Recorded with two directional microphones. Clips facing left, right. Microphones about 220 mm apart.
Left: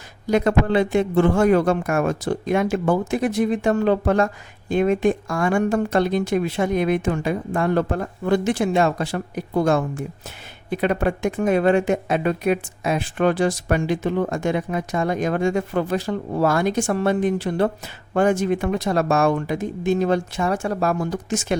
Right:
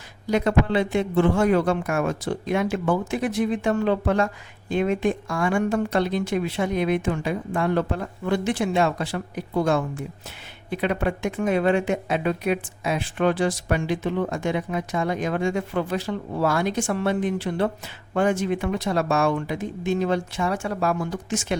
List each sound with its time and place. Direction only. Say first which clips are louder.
0.3 s speech: left 3 dB; 50° left (ahead or behind)